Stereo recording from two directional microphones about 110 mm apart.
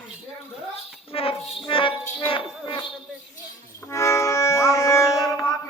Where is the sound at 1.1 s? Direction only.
55° left (ahead or behind).